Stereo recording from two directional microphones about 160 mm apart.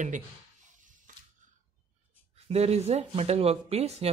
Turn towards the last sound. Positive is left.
turn(degrees=-40)  # may be behind; listen again after turning